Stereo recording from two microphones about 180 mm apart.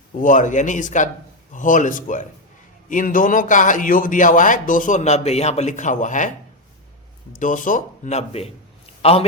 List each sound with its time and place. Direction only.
0.2 s a man's voice: 45° left (ahead or behind)
7.3 s a man's voice: 45° left (ahead or behind)
9.0 s a sound: 35° left (ahead or behind)